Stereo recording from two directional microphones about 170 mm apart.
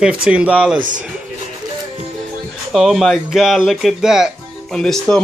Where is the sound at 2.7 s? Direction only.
Centre (ahead or behind).